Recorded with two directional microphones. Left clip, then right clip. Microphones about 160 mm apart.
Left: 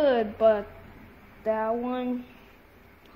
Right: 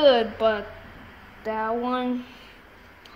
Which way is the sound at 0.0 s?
60° left (ahead or behind).